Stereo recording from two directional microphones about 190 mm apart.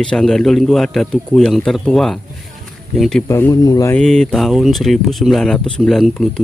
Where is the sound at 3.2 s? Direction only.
15° left (ahead or behind).